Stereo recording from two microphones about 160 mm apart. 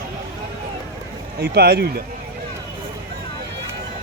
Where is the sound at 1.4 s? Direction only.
85° right.